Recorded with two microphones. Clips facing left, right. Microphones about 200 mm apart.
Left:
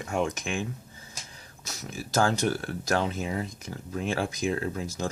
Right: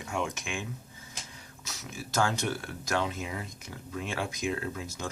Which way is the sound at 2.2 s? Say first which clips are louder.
Left 4 dB; 35° left (ahead or behind).